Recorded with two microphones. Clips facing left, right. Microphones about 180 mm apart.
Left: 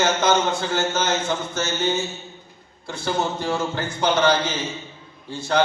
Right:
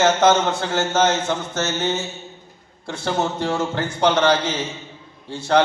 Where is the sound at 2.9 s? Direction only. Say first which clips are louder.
Right 2 dB; 70° right (ahead or behind).